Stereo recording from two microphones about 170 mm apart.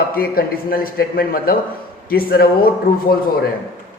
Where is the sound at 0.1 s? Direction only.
60° left (ahead or behind).